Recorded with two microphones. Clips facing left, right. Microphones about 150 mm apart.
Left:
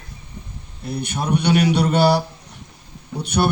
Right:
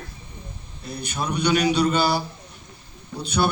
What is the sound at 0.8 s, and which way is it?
A man's voice, 60° left (ahead or behind).